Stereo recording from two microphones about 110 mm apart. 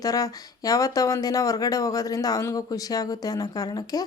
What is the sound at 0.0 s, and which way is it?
Speech, 35° left (ahead or behind).